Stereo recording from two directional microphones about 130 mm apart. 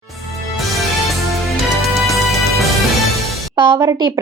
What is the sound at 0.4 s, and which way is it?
Music, centre (ahead or behind).